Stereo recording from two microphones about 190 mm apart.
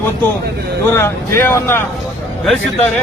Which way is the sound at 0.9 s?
10° left (ahead or behind).